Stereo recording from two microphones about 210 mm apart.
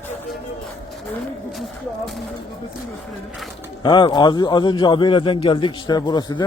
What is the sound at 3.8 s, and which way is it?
A man's voice, 20° left (ahead or behind).